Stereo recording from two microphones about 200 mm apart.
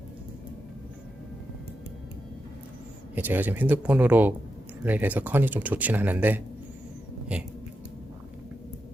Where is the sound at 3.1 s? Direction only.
10° right (ahead or behind).